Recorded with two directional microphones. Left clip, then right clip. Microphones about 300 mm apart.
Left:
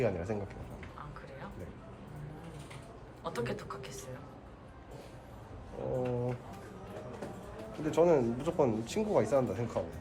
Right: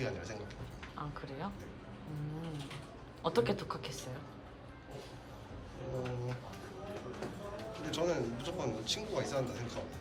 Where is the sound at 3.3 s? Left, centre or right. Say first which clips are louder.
Right 5 dB; centre.